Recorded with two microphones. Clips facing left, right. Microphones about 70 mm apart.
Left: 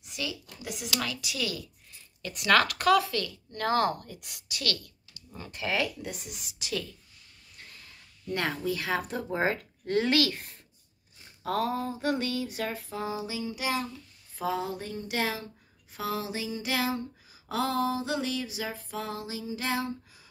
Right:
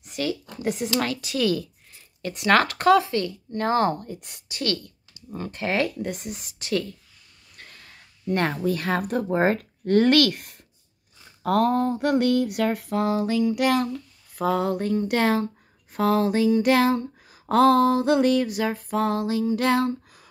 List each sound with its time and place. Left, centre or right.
0.0 s speech: right
7.5 s snort: right
8.3 s speech: right
11.4 s a sound: right